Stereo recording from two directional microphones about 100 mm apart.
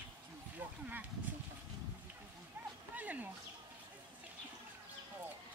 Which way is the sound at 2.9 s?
15° right (ahead or behind).